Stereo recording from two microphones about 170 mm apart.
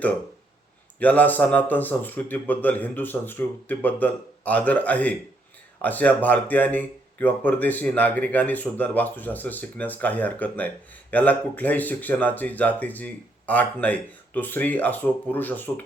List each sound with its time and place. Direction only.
0.9 s speech: 10° left (ahead or behind)